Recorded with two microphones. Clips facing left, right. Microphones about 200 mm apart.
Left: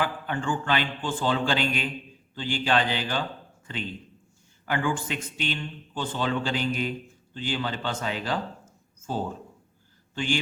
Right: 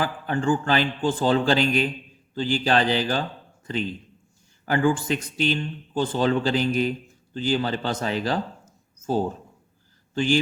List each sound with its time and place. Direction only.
0.0 s a man's voice: 40° right (ahead or behind)
4.6 s a man's voice: 40° right (ahead or behind)